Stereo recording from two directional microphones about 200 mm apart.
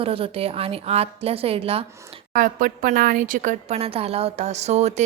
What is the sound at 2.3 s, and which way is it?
A woman's voice, 40° right (ahead or behind).